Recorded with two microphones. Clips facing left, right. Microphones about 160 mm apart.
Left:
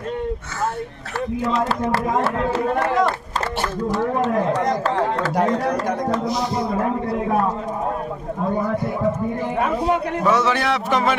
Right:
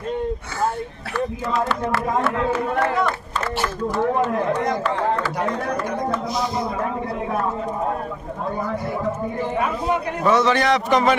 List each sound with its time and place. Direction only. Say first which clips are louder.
2.2 s speech: left 1 dB; 35° left (ahead or behind)
4.5 s speech: left 1 dB; 40° left (ahead or behind)
10.2 s speech: right 3 dB; 10° left (ahead or behind)